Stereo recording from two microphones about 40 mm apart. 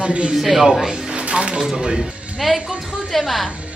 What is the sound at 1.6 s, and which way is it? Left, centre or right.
Speech, centre.